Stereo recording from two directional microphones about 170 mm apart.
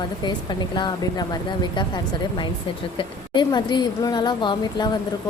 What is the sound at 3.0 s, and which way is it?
A woman's voice, 25° left (ahead or behind).